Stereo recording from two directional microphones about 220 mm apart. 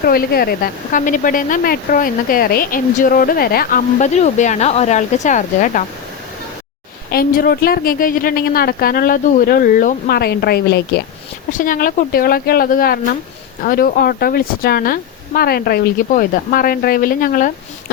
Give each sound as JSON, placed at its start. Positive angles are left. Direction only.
{"t": 0.0, "sound": "speech", "side_deg": 45}
{"t": 7.1, "sound": "a woman's voice", "side_deg": 40}
{"t": 11.5, "sound": "speech", "side_deg": 40}